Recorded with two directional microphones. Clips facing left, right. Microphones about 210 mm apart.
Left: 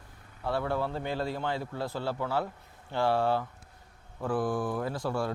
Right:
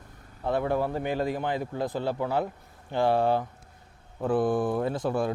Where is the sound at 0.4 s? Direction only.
20° right (ahead or behind).